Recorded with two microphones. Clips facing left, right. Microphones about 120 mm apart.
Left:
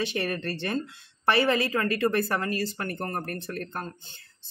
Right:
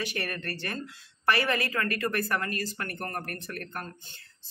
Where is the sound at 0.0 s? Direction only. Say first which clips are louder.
Left 5 dB; 25° left (ahead or behind).